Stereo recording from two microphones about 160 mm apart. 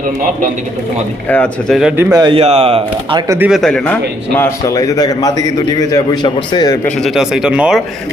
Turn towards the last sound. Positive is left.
turn(degrees=-5)  # may be behind; listen again after turning